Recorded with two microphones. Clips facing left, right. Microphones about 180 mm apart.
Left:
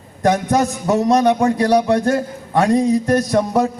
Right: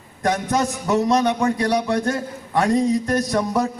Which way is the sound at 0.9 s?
45° left (ahead or behind).